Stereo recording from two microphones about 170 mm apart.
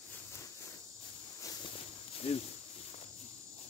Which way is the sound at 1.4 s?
20° left (ahead or behind).